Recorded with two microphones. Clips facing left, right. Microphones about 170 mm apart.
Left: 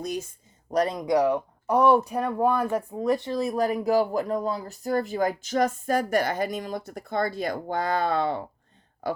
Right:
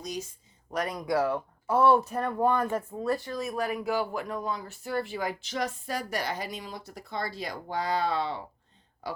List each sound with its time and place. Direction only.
0.0 s speech: 55° left (ahead or behind)
0.7 s speech: 35° left (ahead or behind)
0.9 s speech: 20° left (ahead or behind); by 9.2 s 50° left (ahead or behind)